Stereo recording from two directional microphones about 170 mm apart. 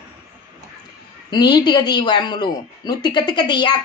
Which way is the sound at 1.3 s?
25° left (ahead or behind).